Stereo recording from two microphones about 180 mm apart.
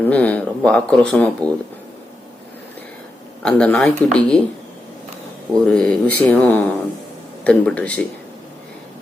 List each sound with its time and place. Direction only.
0.0 s speech: 5° left (ahead or behind)
3.4 s speech: 5° left (ahead or behind)
5.6 s speech: 5° left (ahead or behind)